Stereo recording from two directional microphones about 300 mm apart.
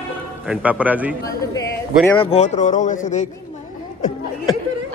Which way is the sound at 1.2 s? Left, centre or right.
Centre.